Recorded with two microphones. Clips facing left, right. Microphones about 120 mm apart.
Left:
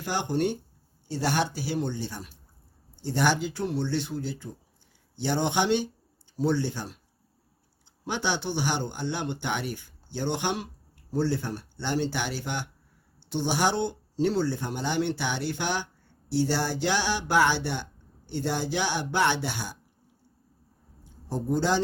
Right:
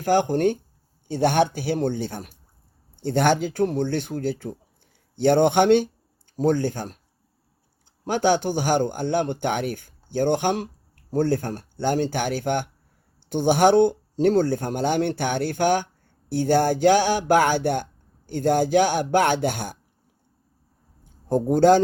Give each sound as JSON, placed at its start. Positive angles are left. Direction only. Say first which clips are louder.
{"t": 0.0, "sound": "speech", "louder": "right 8 dB", "side_deg": -50}
{"t": 8.0, "sound": "speech", "louder": "right 9 dB", "side_deg": -50}
{"t": 21.0, "sound": "a sound", "louder": "right 10 dB", "side_deg": -50}